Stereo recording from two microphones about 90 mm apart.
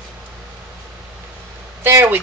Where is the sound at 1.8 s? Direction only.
25° right (ahead or behind).